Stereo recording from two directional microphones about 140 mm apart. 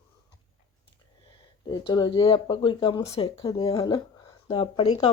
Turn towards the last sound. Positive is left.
turn(degrees=40)  # may be behind; listen again after turning